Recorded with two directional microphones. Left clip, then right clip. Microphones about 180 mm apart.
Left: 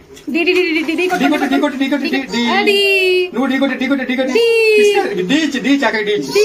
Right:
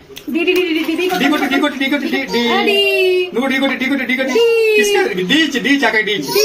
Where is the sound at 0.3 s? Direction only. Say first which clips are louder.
Left 1 dB; 20° left (ahead or behind).